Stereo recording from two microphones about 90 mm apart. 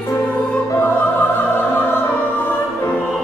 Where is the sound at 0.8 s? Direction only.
25° left (ahead or behind).